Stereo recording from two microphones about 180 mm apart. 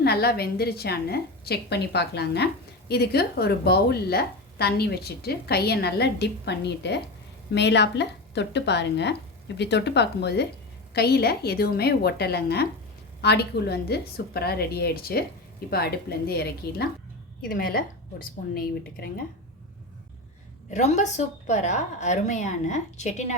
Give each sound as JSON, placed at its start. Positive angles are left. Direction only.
{"t": 0.0, "sound": "a woman's voice", "side_deg": 60}
{"t": 20.7, "sound": "a woman's voice", "side_deg": 40}